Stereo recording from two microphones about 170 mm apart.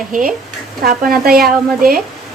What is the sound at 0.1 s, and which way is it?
A woman's voice, 55° right (ahead or behind).